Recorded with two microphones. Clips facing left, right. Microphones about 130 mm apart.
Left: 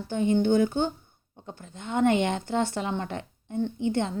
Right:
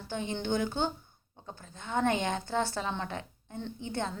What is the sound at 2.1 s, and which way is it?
Speech, 60° left (ahead or behind).